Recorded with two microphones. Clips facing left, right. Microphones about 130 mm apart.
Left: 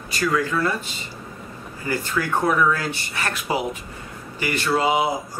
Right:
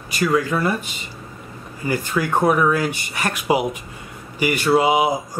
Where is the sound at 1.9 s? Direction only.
15° right (ahead or behind).